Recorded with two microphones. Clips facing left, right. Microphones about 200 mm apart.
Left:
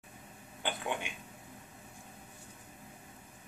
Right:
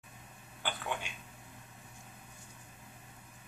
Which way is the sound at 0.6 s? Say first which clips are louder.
Left 2 dB; 20° left (ahead or behind).